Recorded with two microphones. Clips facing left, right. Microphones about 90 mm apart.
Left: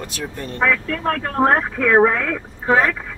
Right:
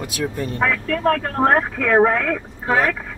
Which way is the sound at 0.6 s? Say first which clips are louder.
Right 1 dB; 55° right (ahead or behind).